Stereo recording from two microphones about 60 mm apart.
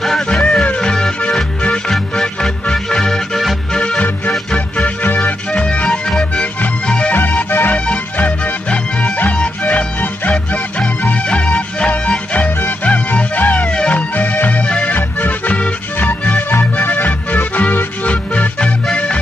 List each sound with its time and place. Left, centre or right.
0.3 s music: centre
7.2 s music: left
15.0 s accordion: left
16.1 s music: left